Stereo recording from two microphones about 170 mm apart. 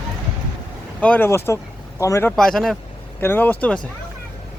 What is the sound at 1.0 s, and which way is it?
Speech, 10° left (ahead or behind).